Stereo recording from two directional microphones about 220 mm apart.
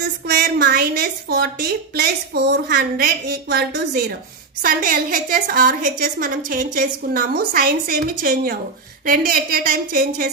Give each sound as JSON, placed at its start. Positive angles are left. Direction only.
{"t": 0.3, "sound": "a woman's voice", "side_deg": -45}